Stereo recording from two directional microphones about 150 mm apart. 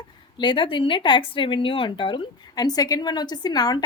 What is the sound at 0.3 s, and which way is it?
Speech, 30° left (ahead or behind).